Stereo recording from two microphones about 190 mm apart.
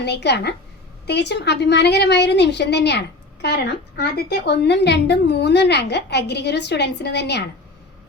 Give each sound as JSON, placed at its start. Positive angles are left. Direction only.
{"t": 0.0, "sound": "a woman's voice", "side_deg": 60}